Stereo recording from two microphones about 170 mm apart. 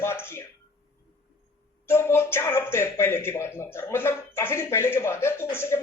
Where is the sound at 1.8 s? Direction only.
15° left (ahead or behind).